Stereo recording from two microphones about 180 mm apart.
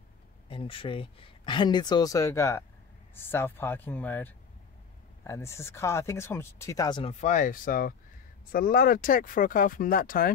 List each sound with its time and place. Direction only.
0.5 s speech: 30° left (ahead or behind)
7.2 s speech: 45° left (ahead or behind)